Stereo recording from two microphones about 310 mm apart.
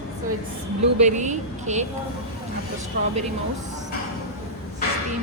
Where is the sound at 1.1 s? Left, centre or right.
Right.